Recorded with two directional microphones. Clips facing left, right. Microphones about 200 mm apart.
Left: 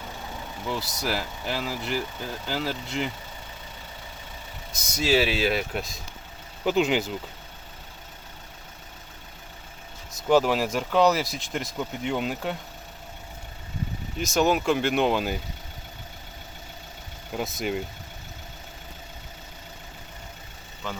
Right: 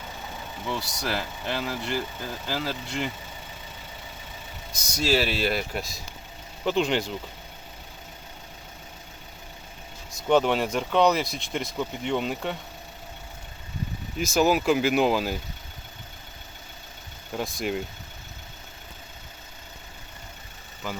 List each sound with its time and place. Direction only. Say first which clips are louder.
0.7 s speech: left 1 dB; 5° left (ahead or behind)
4.9 s speech: left 2 dB; centre (ahead or behind)
10.2 s speech: left 1 dB; 5° left (ahead or behind)
14.2 s speech: right 1 dB; centre (ahead or behind)
17.3 s speech: even; centre (ahead or behind)